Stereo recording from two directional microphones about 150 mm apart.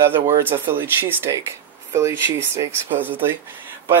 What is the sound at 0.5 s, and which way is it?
Speech, 15° right (ahead or behind).